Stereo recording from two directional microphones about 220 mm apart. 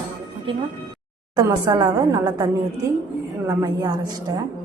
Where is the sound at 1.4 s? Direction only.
20° right (ahead or behind).